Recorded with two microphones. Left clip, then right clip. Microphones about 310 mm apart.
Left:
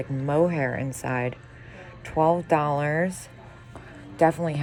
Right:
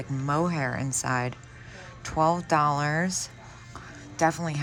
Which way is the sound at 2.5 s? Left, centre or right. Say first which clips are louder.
Left 1 dB; centre.